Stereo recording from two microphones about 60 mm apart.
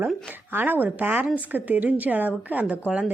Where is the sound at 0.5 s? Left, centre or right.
Right.